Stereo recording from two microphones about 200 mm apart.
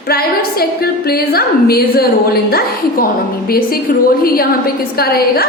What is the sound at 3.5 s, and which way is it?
A woman's voice, 50° left (ahead or behind).